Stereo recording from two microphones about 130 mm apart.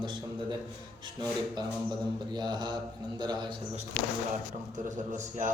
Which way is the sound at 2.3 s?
35° right (ahead or behind).